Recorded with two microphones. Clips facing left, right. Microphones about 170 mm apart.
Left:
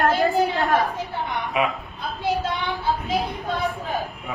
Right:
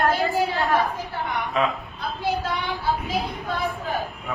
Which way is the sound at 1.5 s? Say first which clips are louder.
Even; 15° left (ahead or behind).